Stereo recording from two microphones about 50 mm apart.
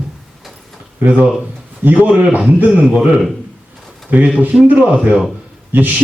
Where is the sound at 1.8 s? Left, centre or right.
Right.